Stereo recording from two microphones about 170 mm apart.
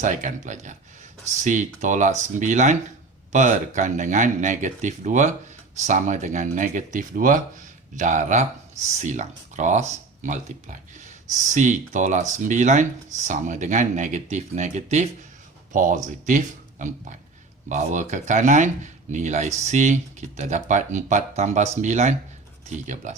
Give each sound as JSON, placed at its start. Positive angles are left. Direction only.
{"t": 0.0, "sound": "speech", "side_deg": -45}